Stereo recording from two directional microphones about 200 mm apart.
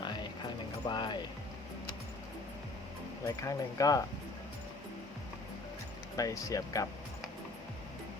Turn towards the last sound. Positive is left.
turn(degrees=15)  # may be behind; listen again after turning